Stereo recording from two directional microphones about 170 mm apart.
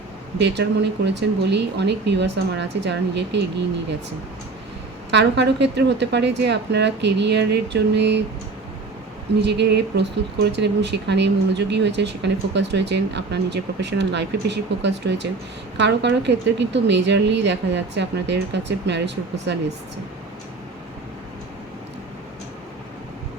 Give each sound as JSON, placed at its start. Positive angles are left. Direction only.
{"t": 0.4, "sound": "speech", "side_deg": -85}
{"t": 5.1, "sound": "speech", "side_deg": -90}
{"t": 9.4, "sound": "speech", "side_deg": -85}